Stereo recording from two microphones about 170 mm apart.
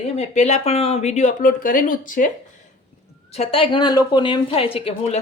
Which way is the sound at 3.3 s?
35° left (ahead or behind).